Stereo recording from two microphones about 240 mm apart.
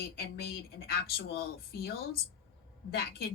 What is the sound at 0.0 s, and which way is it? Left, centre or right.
A woman's voice, left.